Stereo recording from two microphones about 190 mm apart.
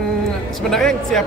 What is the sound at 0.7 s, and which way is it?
Speech, centre (ahead or behind).